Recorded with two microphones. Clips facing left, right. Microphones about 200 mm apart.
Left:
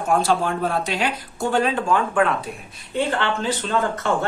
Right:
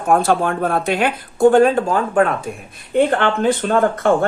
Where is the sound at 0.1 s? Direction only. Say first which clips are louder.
Right 4 dB; 55° right (ahead or behind).